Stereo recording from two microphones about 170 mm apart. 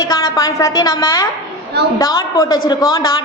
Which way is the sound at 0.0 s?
20° left (ahead or behind).